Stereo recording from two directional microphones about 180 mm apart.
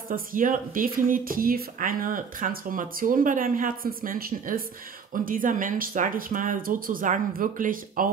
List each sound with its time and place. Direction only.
0.1 s speech: 50° right (ahead or behind)